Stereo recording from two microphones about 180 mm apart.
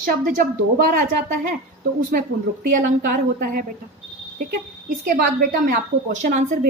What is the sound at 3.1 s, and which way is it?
Speech, 55° right (ahead or behind).